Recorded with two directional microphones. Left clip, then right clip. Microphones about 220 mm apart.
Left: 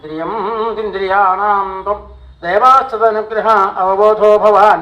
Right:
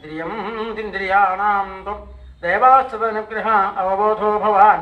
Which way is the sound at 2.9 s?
20° left (ahead or behind).